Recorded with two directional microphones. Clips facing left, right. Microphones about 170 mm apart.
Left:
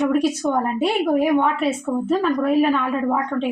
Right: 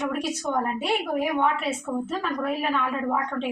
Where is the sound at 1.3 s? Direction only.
40° left (ahead or behind).